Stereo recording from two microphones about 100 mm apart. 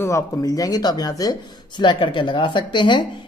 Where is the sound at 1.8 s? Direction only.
50° left (ahead or behind).